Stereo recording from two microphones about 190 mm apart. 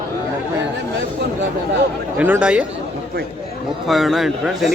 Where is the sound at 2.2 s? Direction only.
10° right (ahead or behind).